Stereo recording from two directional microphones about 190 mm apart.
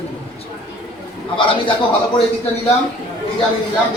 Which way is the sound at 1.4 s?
25° left (ahead or behind).